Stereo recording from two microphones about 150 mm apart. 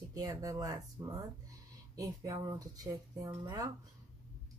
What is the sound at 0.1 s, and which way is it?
Speech, 25° right (ahead or behind).